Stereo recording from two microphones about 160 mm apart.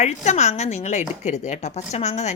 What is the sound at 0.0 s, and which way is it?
Speech, 45° left (ahead or behind).